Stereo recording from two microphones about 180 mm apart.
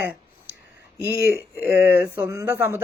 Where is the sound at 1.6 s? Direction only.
10° right (ahead or behind).